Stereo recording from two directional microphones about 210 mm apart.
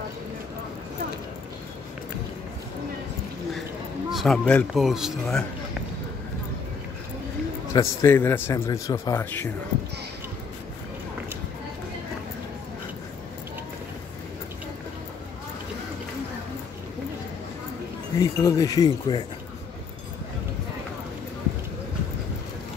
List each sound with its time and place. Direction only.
4.1 s speech: centre (ahead or behind)
7.7 s a man's voice: 15° left (ahead or behind)
18.2 s a man's voice: 15° left (ahead or behind)